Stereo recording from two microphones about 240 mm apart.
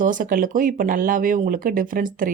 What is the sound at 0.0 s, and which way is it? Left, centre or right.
Speech, right.